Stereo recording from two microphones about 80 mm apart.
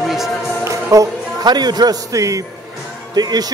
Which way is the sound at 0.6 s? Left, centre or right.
Right.